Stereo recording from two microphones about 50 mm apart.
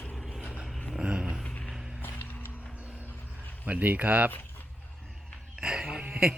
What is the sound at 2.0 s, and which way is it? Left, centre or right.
Music, left.